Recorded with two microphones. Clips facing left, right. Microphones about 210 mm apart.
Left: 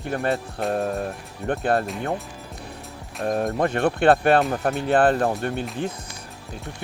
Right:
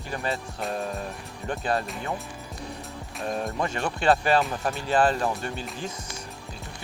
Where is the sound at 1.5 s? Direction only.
55° left (ahead or behind).